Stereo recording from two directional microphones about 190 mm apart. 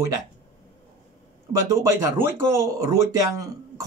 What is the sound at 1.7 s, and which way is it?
Speech, 15° right (ahead or behind).